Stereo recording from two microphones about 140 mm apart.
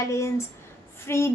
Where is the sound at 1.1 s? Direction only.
20° left (ahead or behind).